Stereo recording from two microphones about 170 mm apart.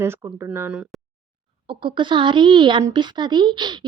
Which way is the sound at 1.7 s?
30° right (ahead or behind).